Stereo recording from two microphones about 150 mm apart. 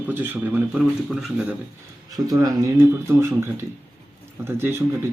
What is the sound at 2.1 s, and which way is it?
Speech, 25° right (ahead or behind).